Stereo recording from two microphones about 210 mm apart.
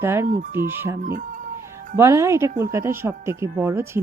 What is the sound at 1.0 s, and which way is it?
Speech, 40° right (ahead or behind).